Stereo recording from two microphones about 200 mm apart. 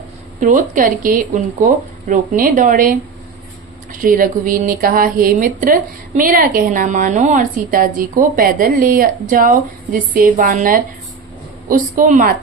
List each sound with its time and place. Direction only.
0.3 s speech: 40° right (ahead or behind)
4.0 s a woman's voice: 45° right (ahead or behind)